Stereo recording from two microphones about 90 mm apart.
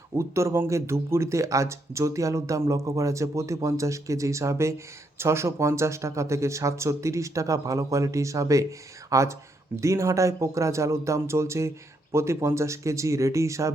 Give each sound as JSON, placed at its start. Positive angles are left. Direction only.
{"t": 0.2, "sound": "speech", "side_deg": -30}